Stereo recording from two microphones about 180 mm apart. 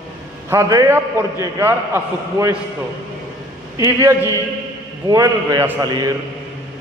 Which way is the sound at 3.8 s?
20° right (ahead or behind).